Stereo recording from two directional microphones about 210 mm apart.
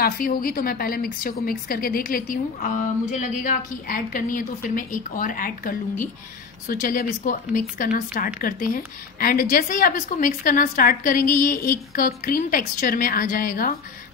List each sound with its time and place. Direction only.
0.0 s speech: 45° left (ahead or behind)